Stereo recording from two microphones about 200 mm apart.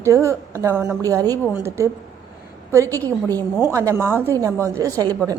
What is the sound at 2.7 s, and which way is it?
A woman's voice, 15° right (ahead or behind).